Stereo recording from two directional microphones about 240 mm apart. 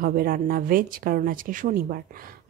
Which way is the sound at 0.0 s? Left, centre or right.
Right.